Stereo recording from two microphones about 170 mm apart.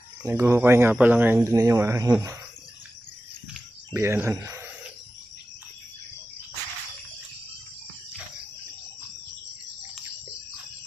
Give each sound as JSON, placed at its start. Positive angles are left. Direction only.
{"t": 0.3, "sound": "speech", "side_deg": -15}
{"t": 3.9, "sound": "speech", "side_deg": -15}